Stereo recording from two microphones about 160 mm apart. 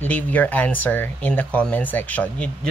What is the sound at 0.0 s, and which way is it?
Speech, 10° left (ahead or behind).